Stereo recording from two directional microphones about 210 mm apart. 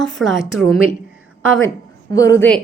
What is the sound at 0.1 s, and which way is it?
Speech, centre (ahead or behind).